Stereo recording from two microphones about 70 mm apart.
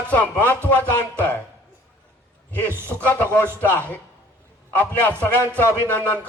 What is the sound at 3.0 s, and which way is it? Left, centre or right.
Speech, left.